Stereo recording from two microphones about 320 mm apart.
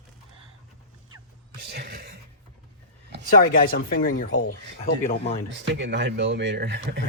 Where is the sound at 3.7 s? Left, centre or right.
Left.